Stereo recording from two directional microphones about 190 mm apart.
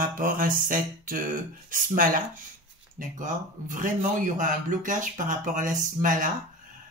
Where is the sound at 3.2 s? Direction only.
45° right (ahead or behind).